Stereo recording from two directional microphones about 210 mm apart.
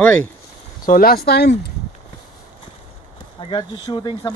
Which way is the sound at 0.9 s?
45° left (ahead or behind).